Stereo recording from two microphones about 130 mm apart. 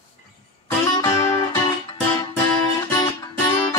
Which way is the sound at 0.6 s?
20° left (ahead or behind).